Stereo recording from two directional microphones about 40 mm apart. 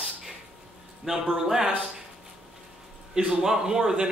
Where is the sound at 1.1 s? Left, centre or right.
Centre.